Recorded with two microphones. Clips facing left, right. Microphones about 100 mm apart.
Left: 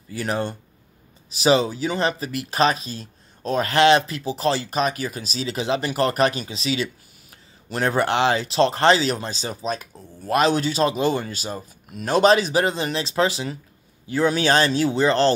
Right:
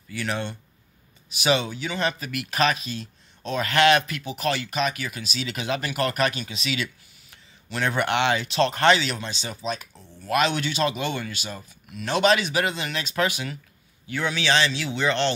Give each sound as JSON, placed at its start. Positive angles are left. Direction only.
{"t": 0.1, "sound": "speech", "side_deg": 40}